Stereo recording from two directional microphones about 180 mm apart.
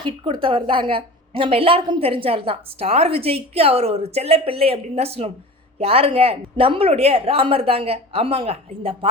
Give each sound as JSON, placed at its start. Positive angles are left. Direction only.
{"t": 0.4, "sound": "a woman's voice", "side_deg": -30}